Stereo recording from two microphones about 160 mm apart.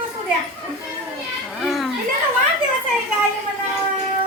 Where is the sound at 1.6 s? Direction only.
Centre (ahead or behind).